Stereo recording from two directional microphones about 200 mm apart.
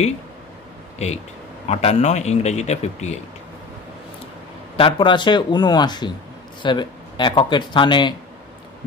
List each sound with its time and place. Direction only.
0.9 s a man's voice: 35° left (ahead or behind)
4.7 s speech: 25° left (ahead or behind)